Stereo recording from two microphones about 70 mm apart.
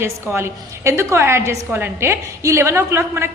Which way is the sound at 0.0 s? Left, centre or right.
Right.